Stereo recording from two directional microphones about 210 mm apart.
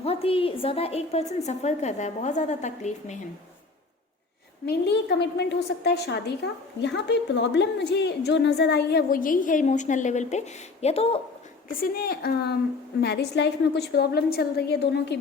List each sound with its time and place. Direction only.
0.0 s a woman's voice: 30° left (ahead or behind)
4.6 s a woman's voice: 50° left (ahead or behind); by 11.2 s 30° left (ahead or behind)
11.7 s a woman's voice: 45° left (ahead or behind)